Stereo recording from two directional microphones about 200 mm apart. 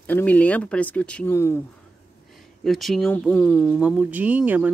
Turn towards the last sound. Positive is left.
turn(degrees=-5)  # may be behind; listen again after turning